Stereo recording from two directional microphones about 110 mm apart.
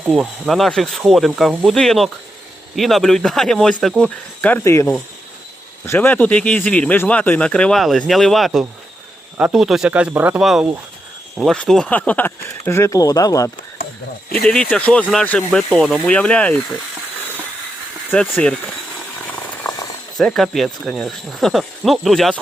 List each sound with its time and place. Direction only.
0.1 s a man's voice: centre (ahead or behind)
4.6 s a man's voice: 25° left (ahead or behind); by 10.4 s 15° right (ahead or behind)
10.4 s speech: 5° right (ahead or behind); by 13.5 s 30° left (ahead or behind)
14.3 s a man's voice: 5° left (ahead or behind)
18.1 s a man's voice: 15° left (ahead or behind)
20.1 s speech: centre (ahead or behind)